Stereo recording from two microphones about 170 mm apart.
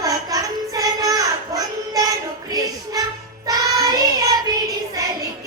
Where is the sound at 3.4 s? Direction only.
20° right (ahead or behind).